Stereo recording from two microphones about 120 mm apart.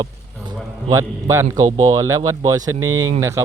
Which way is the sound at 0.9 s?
25° right (ahead or behind).